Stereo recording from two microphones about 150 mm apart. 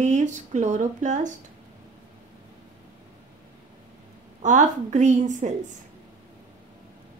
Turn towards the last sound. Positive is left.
turn(degrees=-55)  # may be behind; listen again after turning